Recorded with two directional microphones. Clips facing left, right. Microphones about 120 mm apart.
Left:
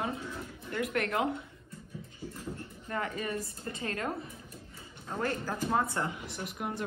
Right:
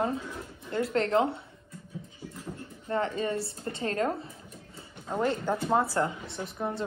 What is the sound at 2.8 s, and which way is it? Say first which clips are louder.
Speech: right 6 dB; 30° right (ahead or behind).